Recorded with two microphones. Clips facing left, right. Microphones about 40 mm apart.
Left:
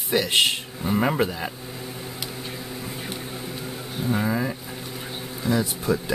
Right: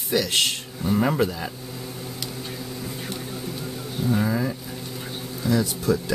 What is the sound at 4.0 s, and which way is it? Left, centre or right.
Speech, centre.